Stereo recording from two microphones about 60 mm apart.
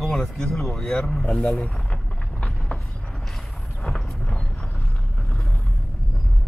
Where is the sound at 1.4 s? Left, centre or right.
Centre.